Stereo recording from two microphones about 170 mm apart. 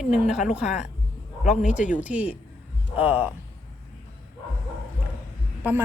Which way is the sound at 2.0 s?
5° right (ahead or behind).